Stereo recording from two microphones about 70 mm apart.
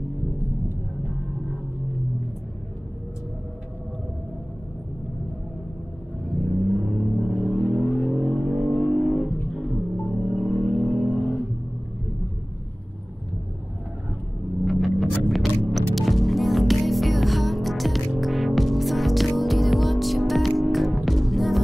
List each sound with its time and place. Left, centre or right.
6.7 s rumble: centre
7.4 s vehicle: centre
8.0 s a sound: centre
8.4 s music: centre
10.8 s a sound: centre
14.6 s music: centre